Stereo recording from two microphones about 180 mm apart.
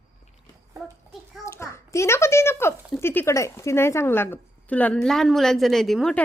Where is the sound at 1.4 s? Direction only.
15° left (ahead or behind).